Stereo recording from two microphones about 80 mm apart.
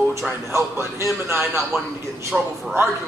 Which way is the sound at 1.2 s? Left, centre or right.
Right.